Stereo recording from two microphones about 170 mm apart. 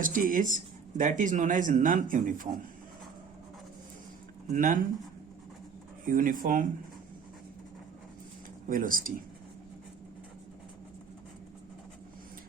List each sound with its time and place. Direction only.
0.0 s speech: 55° right (ahead or behind)
4.4 s speech: 55° right (ahead or behind)
6.1 s speech: 50° right (ahead or behind)
8.7 s speech: 55° right (ahead or behind)